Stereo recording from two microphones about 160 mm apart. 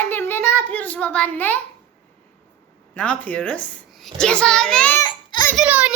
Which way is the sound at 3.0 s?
10° left (ahead or behind).